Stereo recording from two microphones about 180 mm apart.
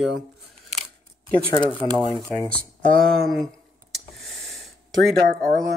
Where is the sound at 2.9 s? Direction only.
5° left (ahead or behind).